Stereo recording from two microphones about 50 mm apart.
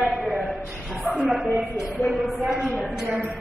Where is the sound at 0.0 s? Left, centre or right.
Centre.